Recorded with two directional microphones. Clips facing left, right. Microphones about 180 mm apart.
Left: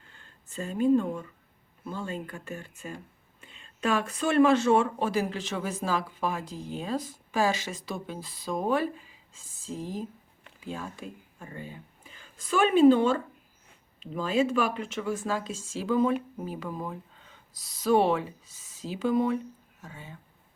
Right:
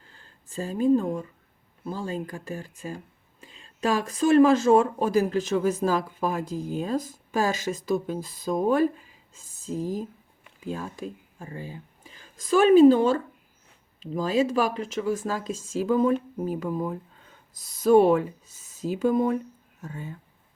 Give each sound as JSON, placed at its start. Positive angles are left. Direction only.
{"t": 0.1, "sound": "speech", "side_deg": -35}
{"t": 17.8, "sound": "speech", "side_deg": -45}